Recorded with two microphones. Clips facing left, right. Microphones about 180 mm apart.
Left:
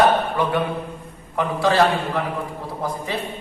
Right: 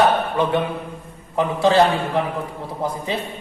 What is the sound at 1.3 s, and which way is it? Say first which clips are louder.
Speech: right 3 dB; 20° right (ahead or behind).